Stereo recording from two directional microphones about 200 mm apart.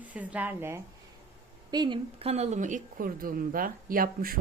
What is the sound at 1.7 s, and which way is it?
Speech, 20° right (ahead or behind).